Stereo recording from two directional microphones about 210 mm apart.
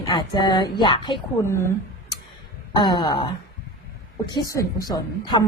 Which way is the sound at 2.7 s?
20° left (ahead or behind).